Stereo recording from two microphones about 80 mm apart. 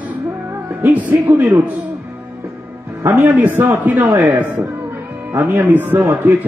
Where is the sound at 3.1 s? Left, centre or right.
Right.